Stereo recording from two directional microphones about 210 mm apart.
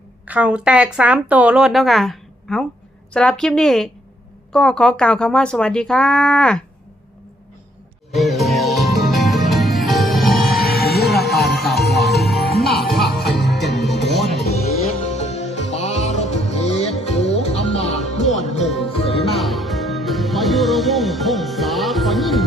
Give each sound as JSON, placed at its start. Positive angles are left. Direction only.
{"t": 0.3, "sound": "speech", "side_deg": -5}
{"t": 8.1, "sound": "music", "side_deg": 0}
{"t": 10.7, "sound": "music", "side_deg": 45}
{"t": 11.1, "sound": "music", "side_deg": 0}
{"t": 14.8, "sound": "music", "side_deg": 30}
{"t": 19.3, "sound": "music", "side_deg": 0}